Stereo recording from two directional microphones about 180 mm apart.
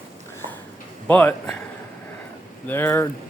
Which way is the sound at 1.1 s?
10° left (ahead or behind).